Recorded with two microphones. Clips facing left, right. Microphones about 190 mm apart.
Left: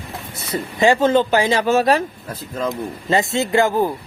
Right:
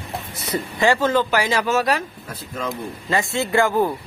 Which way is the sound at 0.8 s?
20° left (ahead or behind).